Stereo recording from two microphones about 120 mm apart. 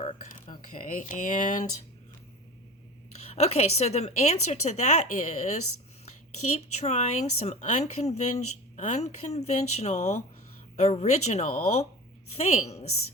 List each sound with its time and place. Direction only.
0.1 s a sound: 70° left (ahead or behind)
0.7 s speech: 90° left
3.2 s a woman's voice: 65° left (ahead or behind)